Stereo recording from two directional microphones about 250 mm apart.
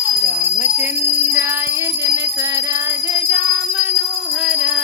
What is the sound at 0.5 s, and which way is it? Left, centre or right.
Music, centre.